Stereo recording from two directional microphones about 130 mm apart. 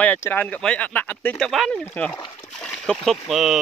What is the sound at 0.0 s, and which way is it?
Speech, 15° left (ahead or behind).